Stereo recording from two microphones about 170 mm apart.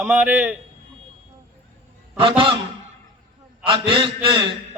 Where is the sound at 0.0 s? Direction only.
10° right (ahead or behind).